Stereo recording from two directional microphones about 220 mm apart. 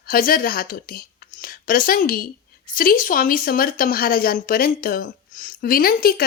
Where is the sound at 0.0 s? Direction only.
40° left (ahead or behind).